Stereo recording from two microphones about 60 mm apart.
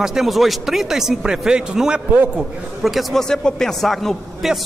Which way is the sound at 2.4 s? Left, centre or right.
Centre.